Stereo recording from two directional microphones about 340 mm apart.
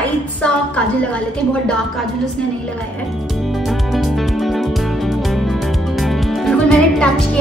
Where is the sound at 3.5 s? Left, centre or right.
Centre.